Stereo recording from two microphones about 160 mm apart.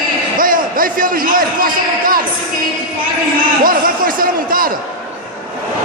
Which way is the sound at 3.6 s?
60° right (ahead or behind).